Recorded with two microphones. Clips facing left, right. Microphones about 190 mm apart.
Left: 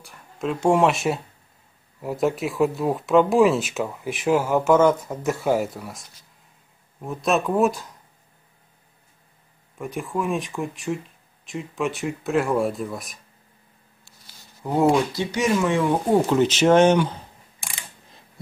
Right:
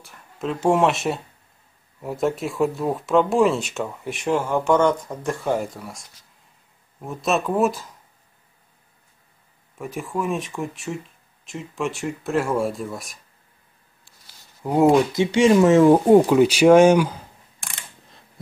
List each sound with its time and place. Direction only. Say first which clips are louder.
0.0 s speech: left 1 dB; centre (ahead or behind)
9.8 s speech: even; centre (ahead or behind)
14.6 s speech: right 3 dB; 10° right (ahead or behind)
15.1 s speech: right 7 dB; 25° right (ahead or behind)
15.6 s speech: right 8 dB; 45° right (ahead or behind)
16.3 s speech: right 4 dB; 10° right (ahead or behind)